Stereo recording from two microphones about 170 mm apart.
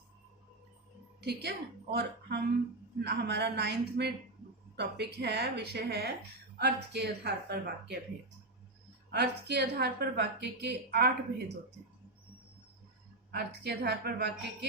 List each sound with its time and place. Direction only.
1.2 s a woman's voice: 70° right (ahead or behind)
9.0 s a woman's voice: 80° right
13.3 s a woman's voice: 70° right (ahead or behind)